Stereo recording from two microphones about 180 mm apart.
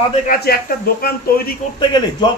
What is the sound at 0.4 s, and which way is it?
A man's voice, 60° left (ahead or behind).